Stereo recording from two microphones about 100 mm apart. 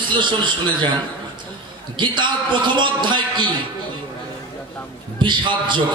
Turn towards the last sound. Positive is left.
turn(degrees=-50)  # may be behind; listen again after turning